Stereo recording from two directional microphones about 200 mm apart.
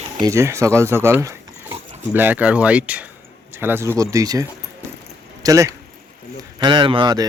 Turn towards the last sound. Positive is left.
turn(degrees=-20)  # may be behind; listen again after turning